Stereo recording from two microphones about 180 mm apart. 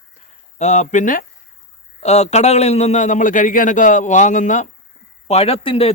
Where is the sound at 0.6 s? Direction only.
40° left (ahead or behind).